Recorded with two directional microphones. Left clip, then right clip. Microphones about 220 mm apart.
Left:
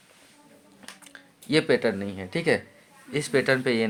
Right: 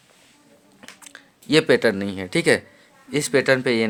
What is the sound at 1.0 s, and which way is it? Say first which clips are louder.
Speech: right 6 dB; 35° right (ahead or behind).